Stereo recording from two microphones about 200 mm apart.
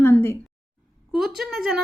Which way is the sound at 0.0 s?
10° left (ahead or behind).